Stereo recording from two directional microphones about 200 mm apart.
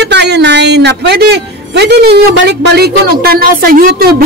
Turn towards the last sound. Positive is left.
turn(degrees=-45)  # may be behind; listen again after turning